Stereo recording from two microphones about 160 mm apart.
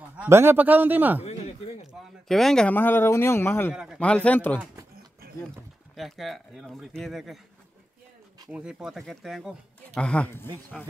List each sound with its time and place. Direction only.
0.2 s a man's voice: 15° right (ahead or behind)
1.2 s a sound: 40° left (ahead or behind)
1.9 s speech: centre (ahead or behind)
3.7 s a man's voice: 5° right (ahead or behind)
4.0 s speech: 10° left (ahead or behind)
5.9 s speech: centre (ahead or behind)
8.5 s speech: 5° right (ahead or behind); by 10.9 s 15° left (ahead or behind)